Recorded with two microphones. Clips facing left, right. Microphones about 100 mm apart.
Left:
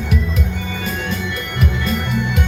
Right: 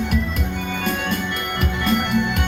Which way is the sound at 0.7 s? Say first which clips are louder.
Right 1 dB; 55° right (ahead or behind).